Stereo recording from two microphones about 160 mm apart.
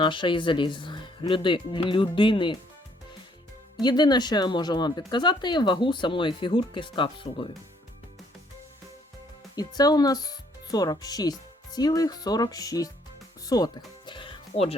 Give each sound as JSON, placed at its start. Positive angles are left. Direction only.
{"t": 0.0, "sound": "speech", "side_deg": 30}
{"t": 3.8, "sound": "speech", "side_deg": 25}
{"t": 9.6, "sound": "speech", "side_deg": 25}
{"t": 14.1, "sound": "music", "side_deg": 30}